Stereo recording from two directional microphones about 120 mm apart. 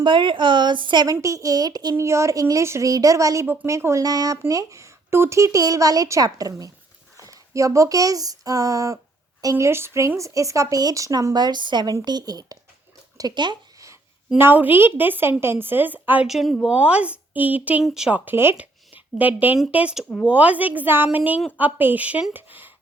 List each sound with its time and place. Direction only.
0.0 s a woman's voice: 40° right (ahead or behind)
1.0 s speech: 25° right (ahead or behind)
3.4 s a woman's voice: 15° right (ahead or behind); by 13.8 s 40° right (ahead or behind)
14.3 s a woman's voice: 15° right (ahead or behind)
16.2 s speech: centre (ahead or behind)
16.7 s a woman's voice: 10° right (ahead or behind)
18.3 s a woman's voice: 15° right (ahead or behind)